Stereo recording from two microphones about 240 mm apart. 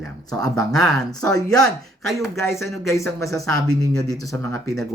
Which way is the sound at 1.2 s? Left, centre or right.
Centre.